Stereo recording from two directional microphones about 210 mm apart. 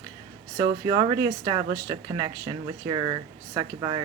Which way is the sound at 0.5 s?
20° right (ahead or behind).